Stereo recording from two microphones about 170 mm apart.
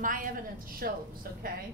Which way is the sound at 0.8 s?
60° right (ahead or behind).